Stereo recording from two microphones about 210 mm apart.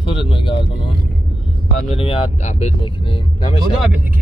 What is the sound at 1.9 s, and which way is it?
Speech, 25° left (ahead or behind).